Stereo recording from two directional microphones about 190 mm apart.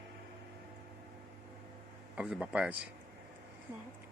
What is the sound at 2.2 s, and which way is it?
Speech, 5° right (ahead or behind).